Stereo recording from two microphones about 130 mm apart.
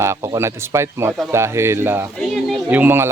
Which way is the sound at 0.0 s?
20° right (ahead or behind).